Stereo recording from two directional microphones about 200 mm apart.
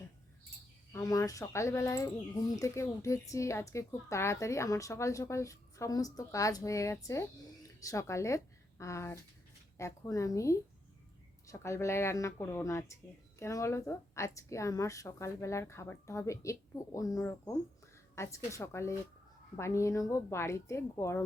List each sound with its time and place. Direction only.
0.9 s speech: 15° left (ahead or behind)